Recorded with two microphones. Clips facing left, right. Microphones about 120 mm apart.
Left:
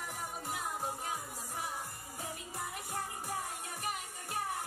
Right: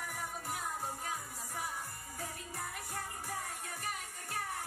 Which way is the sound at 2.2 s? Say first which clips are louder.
Left 1 dB; 20° left (ahead or behind).